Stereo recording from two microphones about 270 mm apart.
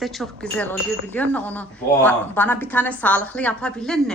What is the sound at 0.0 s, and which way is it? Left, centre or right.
Speech, centre.